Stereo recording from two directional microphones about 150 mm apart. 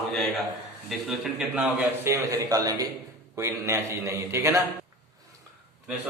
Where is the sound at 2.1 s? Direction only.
20° right (ahead or behind).